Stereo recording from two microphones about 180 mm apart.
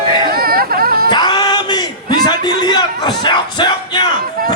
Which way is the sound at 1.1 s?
25° left (ahead or behind).